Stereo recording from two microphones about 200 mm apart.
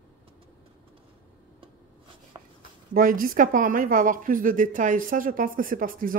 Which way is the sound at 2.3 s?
25° right (ahead or behind).